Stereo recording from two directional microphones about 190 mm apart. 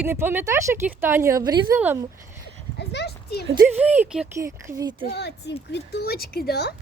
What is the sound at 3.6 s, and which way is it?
Speech, 5° right (ahead or behind).